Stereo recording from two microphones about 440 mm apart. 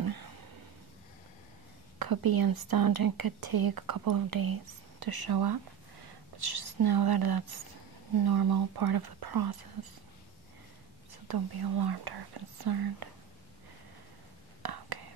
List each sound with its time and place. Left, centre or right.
0.0 s a sound: right
2.0 s speech: right
11.2 s speech: right
14.6 s whispering: right